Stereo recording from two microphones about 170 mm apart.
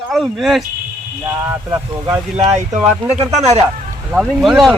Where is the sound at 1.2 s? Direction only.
20° right (ahead or behind).